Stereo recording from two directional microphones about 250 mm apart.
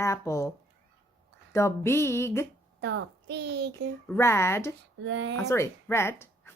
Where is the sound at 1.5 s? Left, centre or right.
Centre.